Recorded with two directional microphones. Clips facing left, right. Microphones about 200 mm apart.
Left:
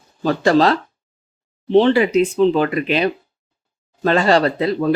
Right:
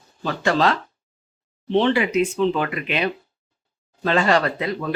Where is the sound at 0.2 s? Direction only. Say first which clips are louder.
Left 6 dB; 35° left (ahead or behind).